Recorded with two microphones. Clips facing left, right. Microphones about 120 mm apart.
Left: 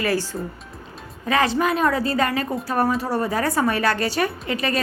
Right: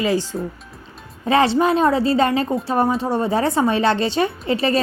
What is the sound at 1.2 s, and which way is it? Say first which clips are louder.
A woman's voice: right 4 dB; 30° right (ahead or behind).